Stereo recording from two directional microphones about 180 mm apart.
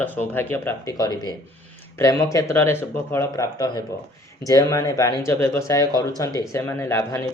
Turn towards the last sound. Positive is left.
turn(degrees=15)  # may be behind; listen again after turning